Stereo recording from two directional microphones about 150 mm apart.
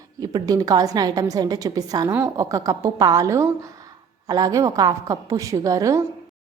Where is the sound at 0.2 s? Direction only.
25° right (ahead or behind).